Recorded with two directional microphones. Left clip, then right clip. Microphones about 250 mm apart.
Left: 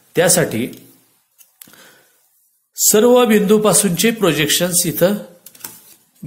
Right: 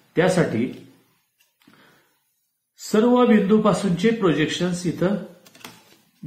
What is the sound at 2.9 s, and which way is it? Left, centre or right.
A man's voice, left.